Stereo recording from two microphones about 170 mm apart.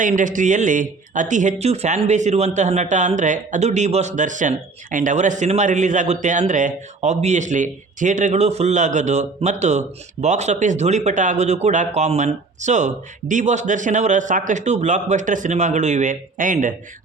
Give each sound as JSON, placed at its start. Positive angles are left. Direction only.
{"t": 0.0, "sound": "speech", "side_deg": -50}